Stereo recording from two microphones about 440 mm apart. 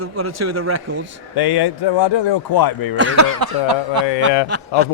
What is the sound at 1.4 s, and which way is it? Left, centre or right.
Speech, left.